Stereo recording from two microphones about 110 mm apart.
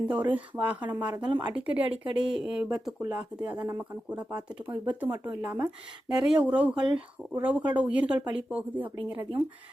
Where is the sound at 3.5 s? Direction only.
25° right (ahead or behind).